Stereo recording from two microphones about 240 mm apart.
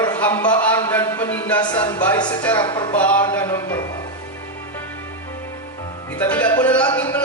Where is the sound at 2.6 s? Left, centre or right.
Centre.